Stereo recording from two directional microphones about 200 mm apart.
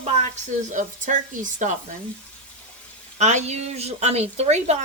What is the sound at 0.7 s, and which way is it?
Speech, 40° right (ahead or behind).